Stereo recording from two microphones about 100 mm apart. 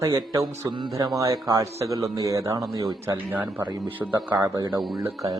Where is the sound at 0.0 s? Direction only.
35° right (ahead or behind).